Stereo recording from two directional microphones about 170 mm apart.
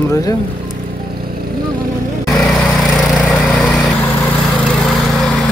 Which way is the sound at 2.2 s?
Centre (ahead or behind).